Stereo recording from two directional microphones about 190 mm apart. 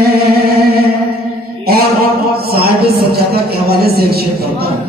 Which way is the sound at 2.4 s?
55° right (ahead or behind).